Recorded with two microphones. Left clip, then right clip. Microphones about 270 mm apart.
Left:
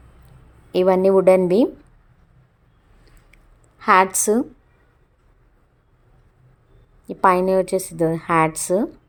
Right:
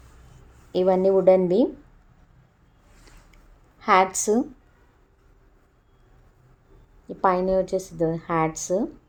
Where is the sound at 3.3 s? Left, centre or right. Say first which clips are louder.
Left 2 dB; left.